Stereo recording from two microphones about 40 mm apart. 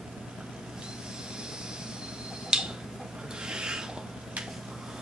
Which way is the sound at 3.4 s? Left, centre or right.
Centre.